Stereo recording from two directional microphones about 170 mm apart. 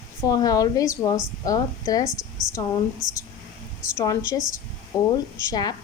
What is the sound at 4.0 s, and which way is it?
Speech, 20° left (ahead or behind).